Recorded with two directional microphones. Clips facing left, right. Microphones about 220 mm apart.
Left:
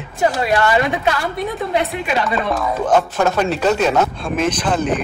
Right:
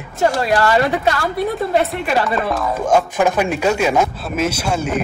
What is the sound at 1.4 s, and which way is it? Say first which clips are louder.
Speech: right 3 dB; centre (ahead or behind).